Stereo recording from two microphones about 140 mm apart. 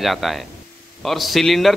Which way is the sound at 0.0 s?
Centre (ahead or behind).